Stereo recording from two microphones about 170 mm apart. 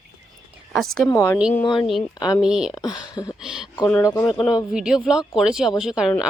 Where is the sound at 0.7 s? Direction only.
Centre (ahead or behind).